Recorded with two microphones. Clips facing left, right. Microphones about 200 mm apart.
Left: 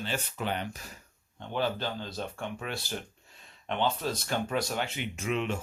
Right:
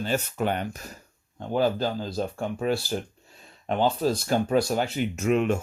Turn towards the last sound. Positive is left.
turn(degrees=-50)  # may be behind; listen again after turning